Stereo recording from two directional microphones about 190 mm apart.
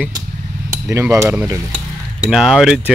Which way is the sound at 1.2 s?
15° right (ahead or behind).